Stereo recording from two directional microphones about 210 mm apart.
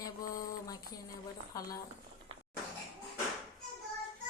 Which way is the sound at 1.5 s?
15° left (ahead or behind).